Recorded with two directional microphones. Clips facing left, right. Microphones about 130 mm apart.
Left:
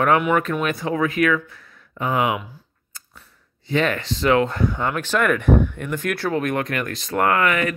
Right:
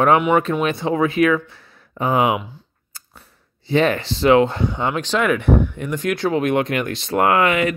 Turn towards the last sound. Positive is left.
turn(degrees=-20)  # may be behind; listen again after turning